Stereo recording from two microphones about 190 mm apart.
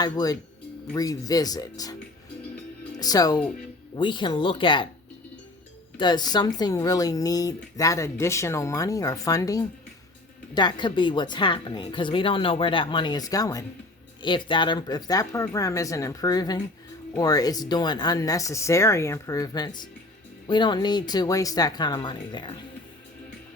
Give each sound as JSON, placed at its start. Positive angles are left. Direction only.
{"t": 0.0, "sound": "speech", "side_deg": 20}
{"t": 3.0, "sound": "speech", "side_deg": 20}
{"t": 6.0, "sound": "speech", "side_deg": 20}